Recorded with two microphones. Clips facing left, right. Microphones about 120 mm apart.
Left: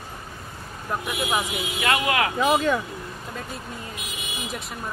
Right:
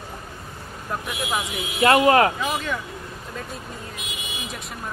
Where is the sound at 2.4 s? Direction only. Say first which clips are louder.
Left 6 dB; 40° left (ahead or behind).